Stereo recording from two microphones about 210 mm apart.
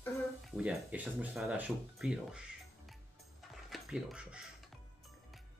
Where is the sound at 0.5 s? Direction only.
5° right (ahead or behind).